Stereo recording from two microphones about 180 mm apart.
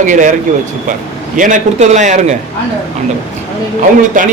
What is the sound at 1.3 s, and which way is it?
A man's voice, 45° right (ahead or behind).